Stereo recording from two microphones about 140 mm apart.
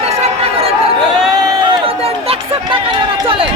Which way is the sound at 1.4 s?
30° right (ahead or behind).